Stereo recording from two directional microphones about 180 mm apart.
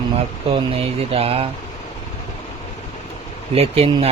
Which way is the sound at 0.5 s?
30° right (ahead or behind).